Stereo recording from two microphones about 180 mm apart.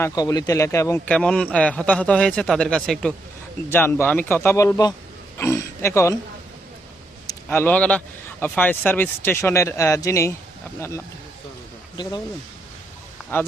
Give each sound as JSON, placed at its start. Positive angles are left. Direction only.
{"t": 0.0, "sound": "a man's voice", "side_deg": 20}
{"t": 7.4, "sound": "a man's voice", "side_deg": 10}